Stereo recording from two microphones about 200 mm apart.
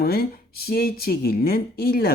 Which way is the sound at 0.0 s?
50° left (ahead or behind).